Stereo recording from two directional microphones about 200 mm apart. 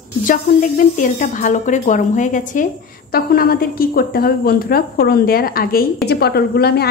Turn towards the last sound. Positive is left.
turn(degrees=55)  # may be behind; listen again after turning